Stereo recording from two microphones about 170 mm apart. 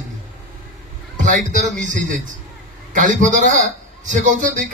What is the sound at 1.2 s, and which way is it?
A man's voice, 50° right (ahead or behind).